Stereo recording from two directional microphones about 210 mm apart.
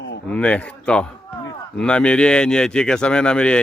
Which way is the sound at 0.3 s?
5° left (ahead or behind).